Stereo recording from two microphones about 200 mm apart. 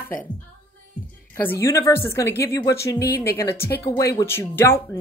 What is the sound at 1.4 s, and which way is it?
A woman's voice, 15° left (ahead or behind).